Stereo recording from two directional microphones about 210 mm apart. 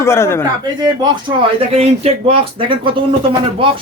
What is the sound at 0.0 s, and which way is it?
Speech, 10° left (ahead or behind).